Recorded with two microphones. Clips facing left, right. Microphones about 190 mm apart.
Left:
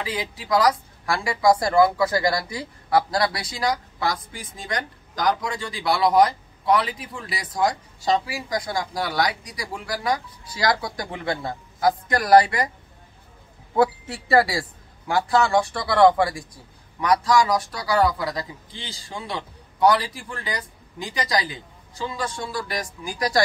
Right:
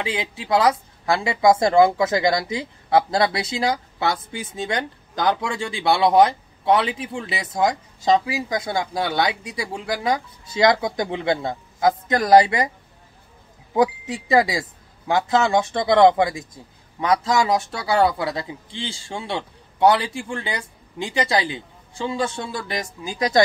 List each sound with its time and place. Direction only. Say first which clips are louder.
0.0 s speech: right 3 dB; 25° right (ahead or behind)
13.7 s speech: right 1 dB; 15° right (ahead or behind)